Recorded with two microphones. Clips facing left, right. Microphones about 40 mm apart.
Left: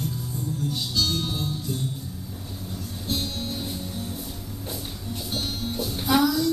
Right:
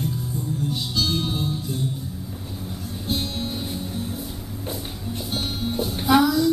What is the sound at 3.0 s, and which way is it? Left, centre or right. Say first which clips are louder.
Music: right 3 dB; centre.